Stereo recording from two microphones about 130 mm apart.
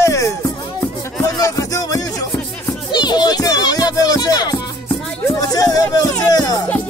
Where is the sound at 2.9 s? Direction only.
35° left (ahead or behind).